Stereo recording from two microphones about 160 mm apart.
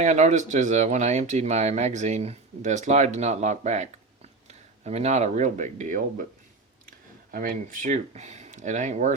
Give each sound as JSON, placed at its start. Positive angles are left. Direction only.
{"t": 0.0, "sound": "speech", "side_deg": -45}
{"t": 7.3, "sound": "speech", "side_deg": -60}